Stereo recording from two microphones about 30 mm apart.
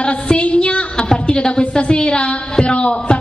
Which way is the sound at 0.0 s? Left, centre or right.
Left.